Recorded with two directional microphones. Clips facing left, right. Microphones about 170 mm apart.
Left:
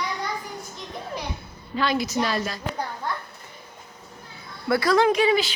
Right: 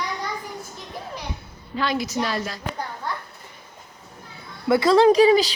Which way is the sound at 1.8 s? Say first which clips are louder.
Left 1 dB; 5° right (ahead or behind).